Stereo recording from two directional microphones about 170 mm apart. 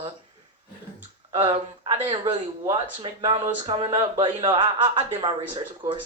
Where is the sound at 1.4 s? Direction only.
35° right (ahead or behind).